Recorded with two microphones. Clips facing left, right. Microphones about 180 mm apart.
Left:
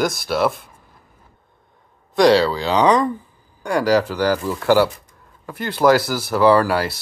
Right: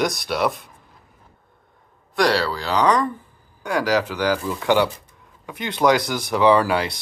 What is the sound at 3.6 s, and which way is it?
Speech, 10° left (ahead or behind).